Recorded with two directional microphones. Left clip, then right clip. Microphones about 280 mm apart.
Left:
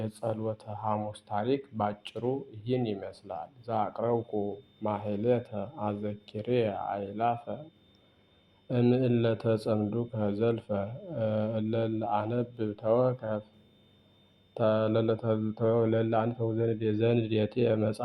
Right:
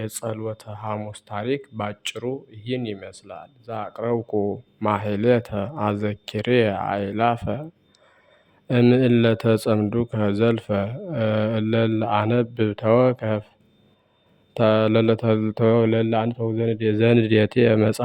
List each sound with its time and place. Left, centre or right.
0.0 s speech: right
8.6 s speech: right
14.5 s speech: right